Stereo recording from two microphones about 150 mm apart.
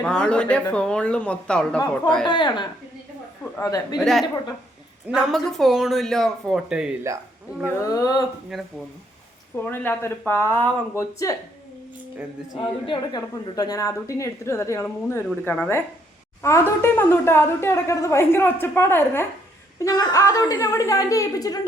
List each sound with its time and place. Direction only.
0.0 s speech: 5° left (ahead or behind)
2.2 s a woman's voice: 30° left (ahead or behind)
3.9 s speech: centre (ahead or behind)
7.6 s a woman's voice: 20° left (ahead or behind)
8.5 s speech: centre (ahead or behind)
9.6 s speech: 15° left (ahead or behind)
12.8 s a woman's voice: 30° left (ahead or behind)
19.8 s a woman's voice: 25° left (ahead or behind)